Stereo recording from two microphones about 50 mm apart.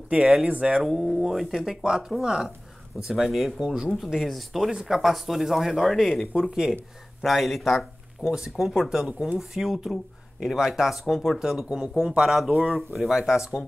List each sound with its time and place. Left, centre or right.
0.5 s speech: right
0.8 s speech: centre
4.0 s speech: centre
8.2 s speech: centre
11.3 s speech: centre